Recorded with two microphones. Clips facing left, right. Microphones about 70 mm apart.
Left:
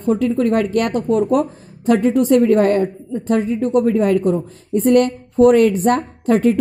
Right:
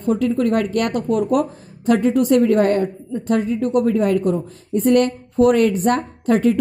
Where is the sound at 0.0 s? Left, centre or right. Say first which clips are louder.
Left 2 dB; left.